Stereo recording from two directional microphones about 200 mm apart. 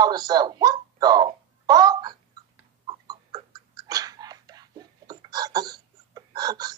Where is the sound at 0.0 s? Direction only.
20° right (ahead or behind).